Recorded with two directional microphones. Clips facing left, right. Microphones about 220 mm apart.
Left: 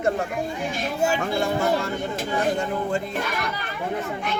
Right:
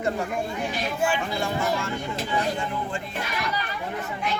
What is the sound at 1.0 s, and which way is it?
Speech, 45° left (ahead or behind).